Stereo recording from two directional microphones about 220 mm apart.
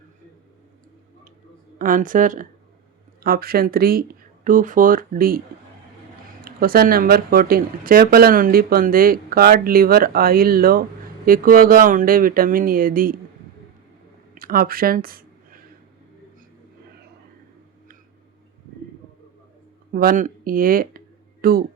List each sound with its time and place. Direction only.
1.8 s speech: 40° right (ahead or behind)
6.4 s speech: 40° right (ahead or behind)
14.3 s speech: 40° right (ahead or behind)
19.9 s speech: 40° right (ahead or behind)